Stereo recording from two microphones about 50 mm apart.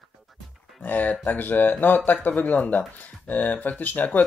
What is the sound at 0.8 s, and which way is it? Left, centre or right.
Speech, left.